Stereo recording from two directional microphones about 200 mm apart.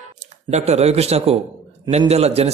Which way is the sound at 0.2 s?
35° right (ahead or behind).